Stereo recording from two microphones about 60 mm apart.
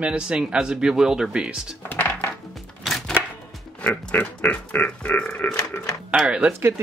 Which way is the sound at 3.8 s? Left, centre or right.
Left.